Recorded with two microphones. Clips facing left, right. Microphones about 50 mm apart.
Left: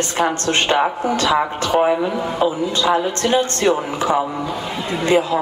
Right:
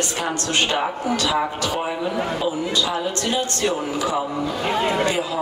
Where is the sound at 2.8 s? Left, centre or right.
Left.